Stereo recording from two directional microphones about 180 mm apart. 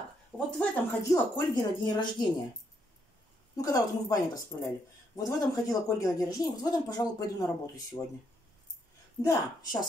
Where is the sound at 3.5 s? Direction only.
20° left (ahead or behind).